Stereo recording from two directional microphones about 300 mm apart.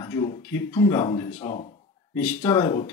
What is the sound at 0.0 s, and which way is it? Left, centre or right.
Speech, centre.